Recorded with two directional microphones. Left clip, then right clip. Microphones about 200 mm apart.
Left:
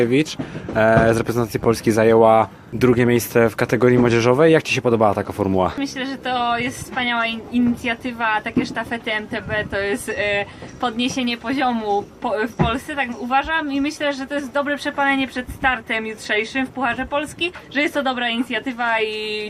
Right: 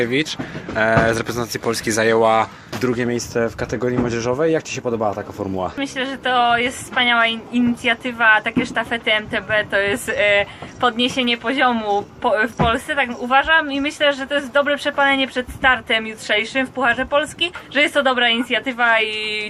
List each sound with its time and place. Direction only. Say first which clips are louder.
0.0 s speech: left 1 dB; 40° left (ahead or behind)
5.8 s a woman's voice: right 3 dB; 10° left (ahead or behind)